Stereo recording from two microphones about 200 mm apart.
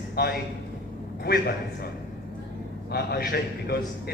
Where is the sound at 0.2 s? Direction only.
50° left (ahead or behind).